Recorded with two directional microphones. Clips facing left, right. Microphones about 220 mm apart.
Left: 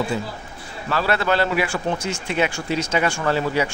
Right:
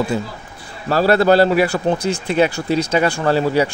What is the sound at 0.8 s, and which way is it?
Speech, 40° right (ahead or behind).